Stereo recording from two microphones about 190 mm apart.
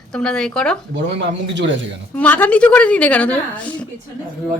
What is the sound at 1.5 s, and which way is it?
Speech, 75° right (ahead or behind).